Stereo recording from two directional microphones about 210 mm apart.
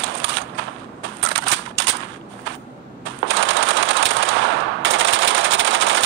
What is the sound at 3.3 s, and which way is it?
Machine gun, 65° right (ahead or behind).